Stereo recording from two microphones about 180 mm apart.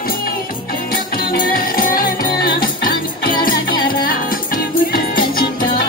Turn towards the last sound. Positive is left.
turn(degrees=55)  # may be behind; listen again after turning